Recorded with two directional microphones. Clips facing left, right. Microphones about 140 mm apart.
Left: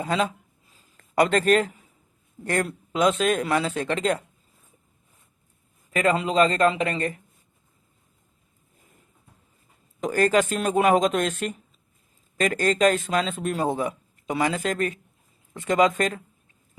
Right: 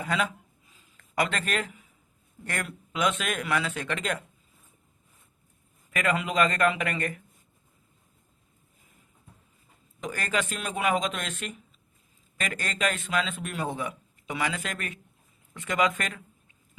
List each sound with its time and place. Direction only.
0.0 s a sound: 30° left (ahead or behind)
2.4 s speech: 35° left (ahead or behind)
5.9 s speech: 30° left (ahead or behind)
10.0 s speech: 40° left (ahead or behind)